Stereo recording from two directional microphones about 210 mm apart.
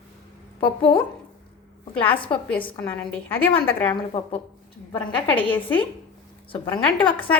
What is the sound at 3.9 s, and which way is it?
Speech, 25° left (ahead or behind).